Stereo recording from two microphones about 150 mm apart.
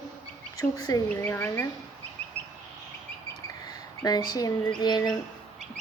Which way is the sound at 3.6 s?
25° left (ahead or behind).